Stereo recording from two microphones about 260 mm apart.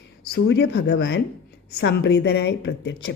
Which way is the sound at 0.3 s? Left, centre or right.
Left.